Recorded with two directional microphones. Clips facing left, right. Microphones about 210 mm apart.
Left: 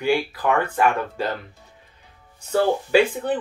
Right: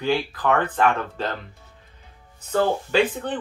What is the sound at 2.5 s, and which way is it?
Speech, 10° left (ahead or behind).